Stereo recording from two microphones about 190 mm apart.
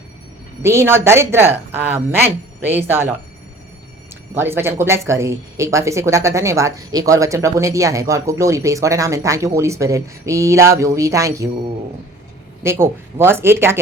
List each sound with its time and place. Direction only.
0.6 s speech: 15° right (ahead or behind)
4.4 s speech: 10° right (ahead or behind)
12.6 s speech: 15° right (ahead or behind)